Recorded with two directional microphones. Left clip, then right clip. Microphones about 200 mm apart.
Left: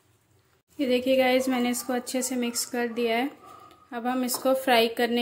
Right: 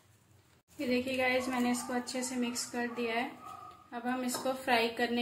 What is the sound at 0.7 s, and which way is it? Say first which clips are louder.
A woman's voice: left 10 dB; 45° left (ahead or behind).